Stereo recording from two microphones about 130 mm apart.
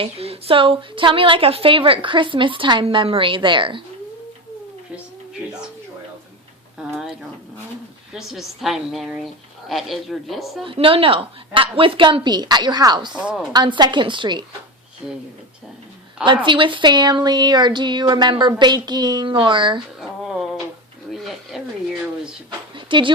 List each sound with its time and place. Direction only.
0.0 s a woman's voice: 50° right (ahead or behind)
8.1 s a woman's voice: 5° right (ahead or behind)
10.6 s a woman's voice: 45° right (ahead or behind)
13.1 s speech: 5° right (ahead or behind)
13.5 s a woman's voice: 35° right (ahead or behind)
15.0 s a woman's voice: 5° right (ahead or behind)
16.2 s a woman's voice: 40° right (ahead or behind)
20.0 s a sound: centre (ahead or behind)
22.7 s a sound: 40° right (ahead or behind)